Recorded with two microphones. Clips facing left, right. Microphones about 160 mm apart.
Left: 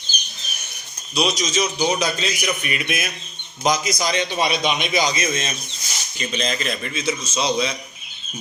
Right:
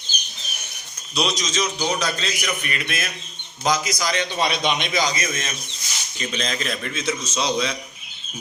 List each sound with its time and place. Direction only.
1.1 s a man's voice: 5° left (ahead or behind)
4.4 s speech: 5° left (ahead or behind)
4.9 s a man's voice: 20° left (ahead or behind)
6.1 s speech: centre (ahead or behind)